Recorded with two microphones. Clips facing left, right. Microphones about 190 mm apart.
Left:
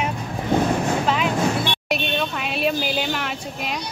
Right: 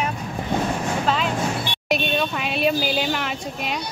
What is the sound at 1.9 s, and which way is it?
A woman's voice, centre (ahead or behind).